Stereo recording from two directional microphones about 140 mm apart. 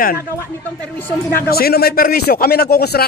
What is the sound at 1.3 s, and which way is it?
A man's voice, 90° left.